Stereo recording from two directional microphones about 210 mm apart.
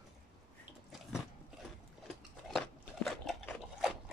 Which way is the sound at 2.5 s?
Centre (ahead or behind).